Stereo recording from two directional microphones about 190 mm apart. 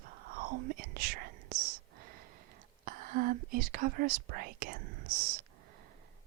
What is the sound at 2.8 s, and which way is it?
Speech, 45° right (ahead or behind).